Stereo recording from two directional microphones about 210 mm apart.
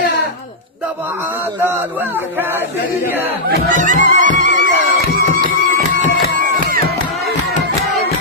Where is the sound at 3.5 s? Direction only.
40° right (ahead or behind).